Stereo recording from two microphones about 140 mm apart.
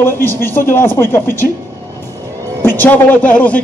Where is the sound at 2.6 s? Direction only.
15° left (ahead or behind).